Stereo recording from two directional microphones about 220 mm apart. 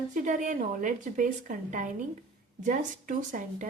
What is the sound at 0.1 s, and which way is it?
A woman's voice, 35° right (ahead or behind).